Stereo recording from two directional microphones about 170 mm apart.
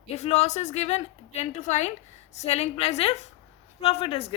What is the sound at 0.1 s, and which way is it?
A woman's voice, 40° left (ahead or behind).